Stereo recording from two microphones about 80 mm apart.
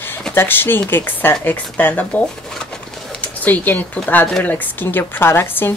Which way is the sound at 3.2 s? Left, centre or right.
Left.